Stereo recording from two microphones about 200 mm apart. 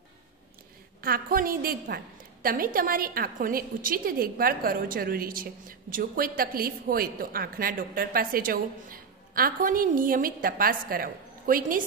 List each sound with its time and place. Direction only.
1.0 s a woman's voice: 45° right (ahead or behind)